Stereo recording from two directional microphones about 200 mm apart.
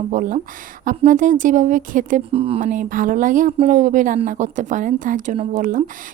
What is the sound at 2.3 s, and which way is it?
Speech, 30° right (ahead or behind).